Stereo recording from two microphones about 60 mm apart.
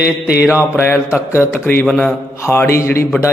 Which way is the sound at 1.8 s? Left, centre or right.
Centre.